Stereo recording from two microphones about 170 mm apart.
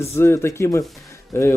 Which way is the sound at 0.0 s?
15° left (ahead or behind).